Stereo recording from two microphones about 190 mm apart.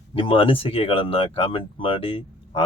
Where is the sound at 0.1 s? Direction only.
30° left (ahead or behind).